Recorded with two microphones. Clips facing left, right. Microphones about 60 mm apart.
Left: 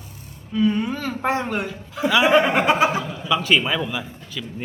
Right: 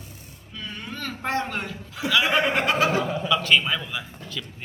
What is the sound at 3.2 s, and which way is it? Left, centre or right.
A man's voice, centre.